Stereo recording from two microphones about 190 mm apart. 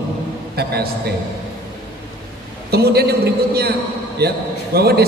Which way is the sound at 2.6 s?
55° right (ahead or behind).